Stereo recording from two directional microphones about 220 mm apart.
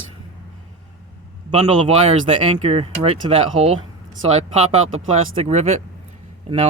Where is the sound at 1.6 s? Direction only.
25° right (ahead or behind).